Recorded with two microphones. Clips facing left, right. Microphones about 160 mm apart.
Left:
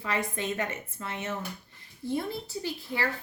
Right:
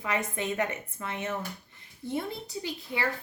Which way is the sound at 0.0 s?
20° right (ahead or behind).